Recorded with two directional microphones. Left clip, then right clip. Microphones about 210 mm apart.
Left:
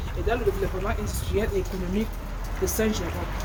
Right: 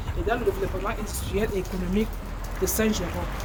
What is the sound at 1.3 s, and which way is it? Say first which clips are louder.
Speech: even; 30° right (ahead or behind).